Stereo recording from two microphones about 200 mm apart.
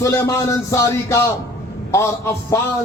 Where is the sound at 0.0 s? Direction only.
15° left (ahead or behind).